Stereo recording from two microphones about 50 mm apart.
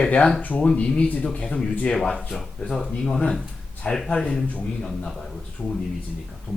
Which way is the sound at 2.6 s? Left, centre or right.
Centre.